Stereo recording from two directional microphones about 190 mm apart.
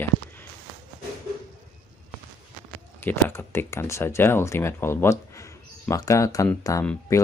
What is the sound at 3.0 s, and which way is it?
Speech, 10° left (ahead or behind).